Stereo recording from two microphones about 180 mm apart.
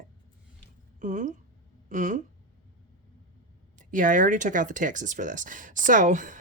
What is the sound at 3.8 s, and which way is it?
Speech, 45° right (ahead or behind).